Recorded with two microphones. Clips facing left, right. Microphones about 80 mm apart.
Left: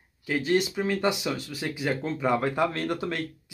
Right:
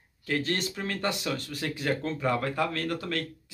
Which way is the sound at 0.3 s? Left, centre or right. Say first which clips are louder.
Left 5 dB; centre.